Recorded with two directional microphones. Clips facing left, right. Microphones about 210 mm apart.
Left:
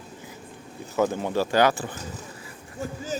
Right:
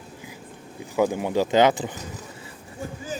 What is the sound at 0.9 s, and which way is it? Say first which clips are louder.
Speech: right 2 dB; 10° right (ahead or behind).